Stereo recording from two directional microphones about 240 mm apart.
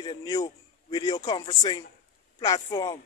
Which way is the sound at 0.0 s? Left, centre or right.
Centre.